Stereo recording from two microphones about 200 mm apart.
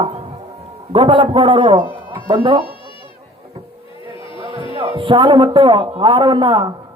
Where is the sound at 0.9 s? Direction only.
25° right (ahead or behind).